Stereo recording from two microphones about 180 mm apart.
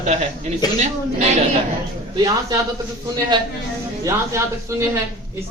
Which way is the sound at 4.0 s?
15° right (ahead or behind).